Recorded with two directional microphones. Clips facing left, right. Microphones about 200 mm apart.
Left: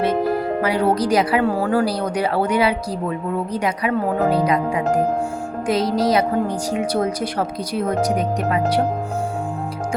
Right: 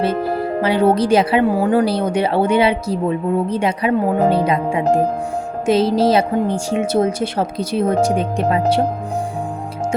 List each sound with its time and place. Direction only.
0.6 s speech: 25° right (ahead or behind)